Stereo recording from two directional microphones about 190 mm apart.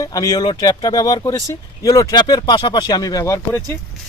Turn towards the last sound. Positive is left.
turn(degrees=15)  # may be behind; listen again after turning